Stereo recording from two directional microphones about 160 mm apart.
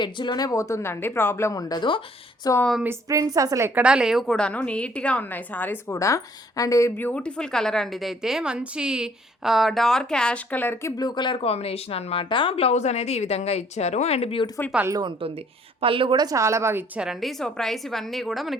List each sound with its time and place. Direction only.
0.0 s speech: 30° left (ahead or behind)
2.6 s a woman's voice: 5° left (ahead or behind)
2.8 s a woman's voice: 15° right (ahead or behind)
3.8 s a woman's voice: 5° right (ahead or behind); by 14.5 s 35° left (ahead or behind)
14.8 s a woman's voice: 25° right (ahead or behind)
15.8 s a woman's voice: 35° right (ahead or behind); by 18.5 s centre (ahead or behind)